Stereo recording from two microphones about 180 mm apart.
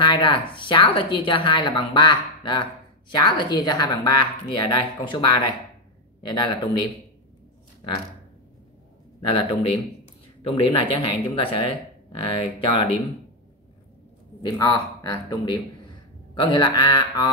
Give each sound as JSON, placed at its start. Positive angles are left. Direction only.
{"t": 0.0, "sound": "a sound", "side_deg": 25}
{"t": 0.6, "sound": "speech", "side_deg": 25}
{"t": 9.3, "sound": "a man's voice", "side_deg": 30}
{"t": 14.4, "sound": "speech", "side_deg": 20}